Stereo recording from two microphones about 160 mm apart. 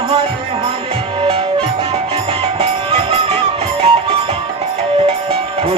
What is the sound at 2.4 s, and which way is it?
Music, 35° right (ahead or behind).